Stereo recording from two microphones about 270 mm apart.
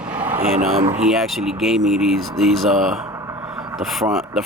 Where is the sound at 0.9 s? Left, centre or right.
Centre.